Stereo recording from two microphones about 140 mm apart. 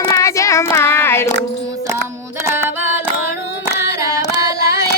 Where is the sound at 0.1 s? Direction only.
20° left (ahead or behind).